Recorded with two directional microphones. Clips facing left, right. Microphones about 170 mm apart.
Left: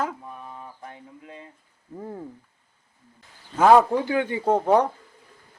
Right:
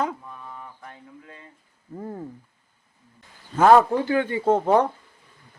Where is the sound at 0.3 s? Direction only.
25° left (ahead or behind).